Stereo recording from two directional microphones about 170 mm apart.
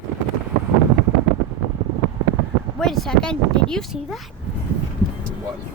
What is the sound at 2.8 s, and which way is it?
Speech, centre (ahead or behind).